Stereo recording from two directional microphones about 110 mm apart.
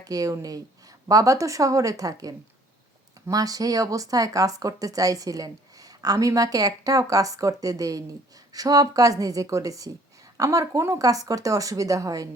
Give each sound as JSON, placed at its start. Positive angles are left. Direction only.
{"t": 0.0, "sound": "speech", "side_deg": -30}